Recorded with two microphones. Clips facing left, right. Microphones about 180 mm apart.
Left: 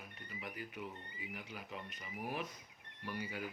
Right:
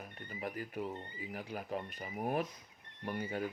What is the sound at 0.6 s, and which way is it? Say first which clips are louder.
Speech: right 7 dB; 35° right (ahead or behind).